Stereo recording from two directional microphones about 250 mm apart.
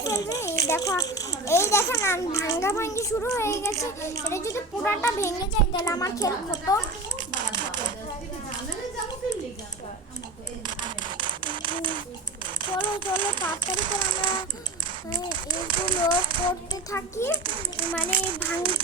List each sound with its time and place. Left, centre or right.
0.0 s a child's voice: centre
10.7 s a sound: centre
12.6 s a sound: centre
13.1 s a child's voice: centre
16.4 s a child's voice: centre
17.4 s a child's voice: right